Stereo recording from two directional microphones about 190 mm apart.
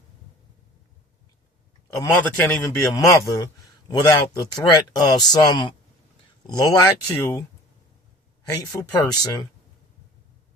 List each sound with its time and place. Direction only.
2.0 s a man's voice: 10° left (ahead or behind)
8.4 s a man's voice: 20° left (ahead or behind)